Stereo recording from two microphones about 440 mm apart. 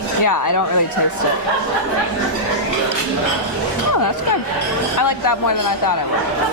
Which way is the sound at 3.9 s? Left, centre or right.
Left.